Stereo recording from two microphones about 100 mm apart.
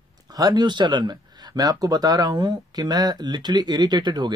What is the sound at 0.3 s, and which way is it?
Speech, 40° right (ahead or behind).